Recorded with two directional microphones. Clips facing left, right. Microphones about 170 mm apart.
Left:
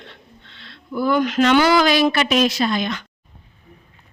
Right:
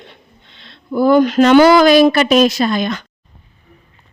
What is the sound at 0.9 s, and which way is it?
Speech, 35° right (ahead or behind).